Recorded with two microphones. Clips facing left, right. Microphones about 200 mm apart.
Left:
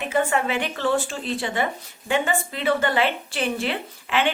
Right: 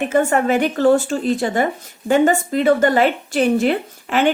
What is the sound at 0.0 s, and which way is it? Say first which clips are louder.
Speech: right 6 dB; 45° right (ahead or behind).